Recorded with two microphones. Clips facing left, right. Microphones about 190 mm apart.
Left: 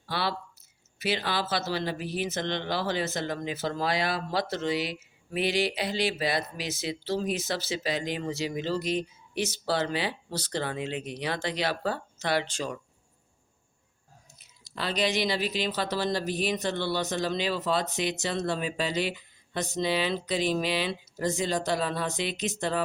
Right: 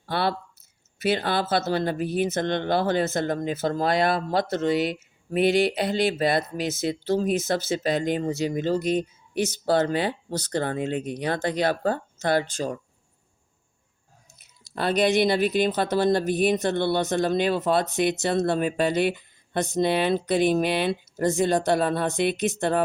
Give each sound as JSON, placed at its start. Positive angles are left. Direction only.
{"t": 0.0, "sound": "a sound", "side_deg": -55}
{"t": 0.9, "sound": "speech", "side_deg": -50}
{"t": 14.8, "sound": "speech", "side_deg": -55}